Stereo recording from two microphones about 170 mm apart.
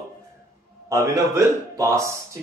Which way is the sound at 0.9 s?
15° right (ahead or behind).